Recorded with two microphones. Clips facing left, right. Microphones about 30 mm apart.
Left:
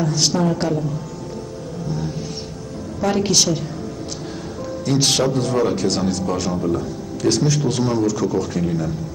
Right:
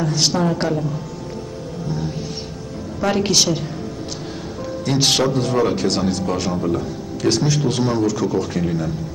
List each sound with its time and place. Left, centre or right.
0.0 s speech: centre
3.0 s speech: right
4.8 s speech: centre